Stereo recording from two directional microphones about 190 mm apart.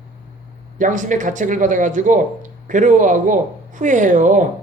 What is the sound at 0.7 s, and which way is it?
Speech, 40° right (ahead or behind).